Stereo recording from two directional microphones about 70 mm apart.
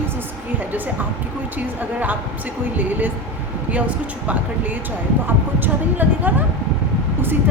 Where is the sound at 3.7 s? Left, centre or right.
Right.